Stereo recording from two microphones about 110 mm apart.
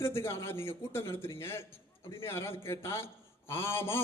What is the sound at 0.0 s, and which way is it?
A man's voice, 25° left (ahead or behind).